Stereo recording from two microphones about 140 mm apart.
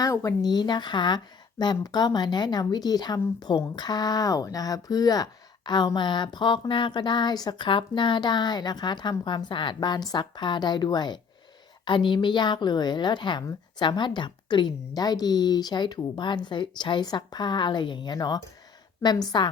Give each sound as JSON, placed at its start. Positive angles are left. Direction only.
{"t": 0.0, "sound": "a woman's voice", "side_deg": 25}